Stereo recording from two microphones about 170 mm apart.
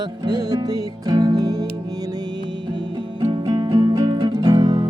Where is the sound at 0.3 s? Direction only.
25° right (ahead or behind).